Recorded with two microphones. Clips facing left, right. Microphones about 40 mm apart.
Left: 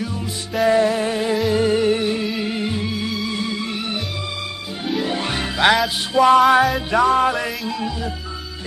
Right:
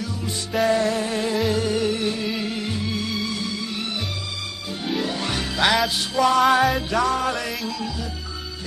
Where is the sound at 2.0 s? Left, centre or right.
Centre.